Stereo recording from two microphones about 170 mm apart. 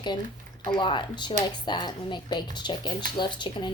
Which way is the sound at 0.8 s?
30° left (ahead or behind).